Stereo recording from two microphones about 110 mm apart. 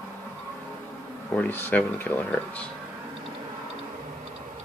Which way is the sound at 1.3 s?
20° left (ahead or behind).